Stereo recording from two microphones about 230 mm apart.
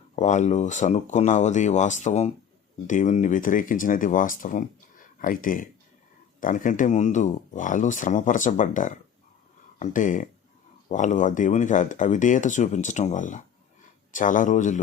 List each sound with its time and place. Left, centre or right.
0.2 s speech: left